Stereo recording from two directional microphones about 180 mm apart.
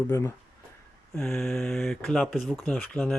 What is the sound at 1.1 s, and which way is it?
Speech, 5° left (ahead or behind).